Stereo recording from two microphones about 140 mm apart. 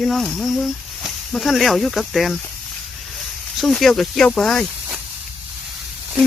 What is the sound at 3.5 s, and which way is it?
Speech, centre (ahead or behind).